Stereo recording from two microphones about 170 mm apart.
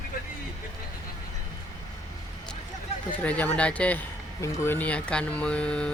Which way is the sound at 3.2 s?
10° left (ahead or behind).